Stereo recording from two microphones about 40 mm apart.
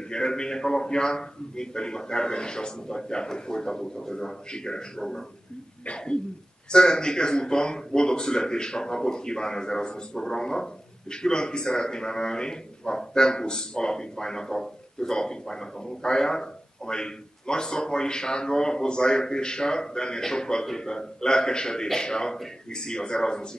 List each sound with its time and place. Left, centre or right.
0.1 s speech: centre